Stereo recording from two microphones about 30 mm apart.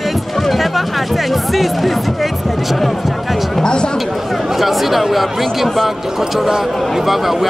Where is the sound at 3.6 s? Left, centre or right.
Left.